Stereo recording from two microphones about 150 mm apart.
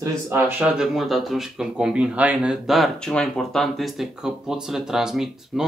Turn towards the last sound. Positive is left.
turn(degrees=-5)  # may be behind; listen again after turning